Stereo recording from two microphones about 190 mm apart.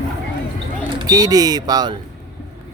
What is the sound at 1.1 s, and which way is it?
Speech, 20° right (ahead or behind).